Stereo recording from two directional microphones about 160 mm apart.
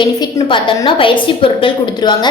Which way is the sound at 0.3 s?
30° left (ahead or behind).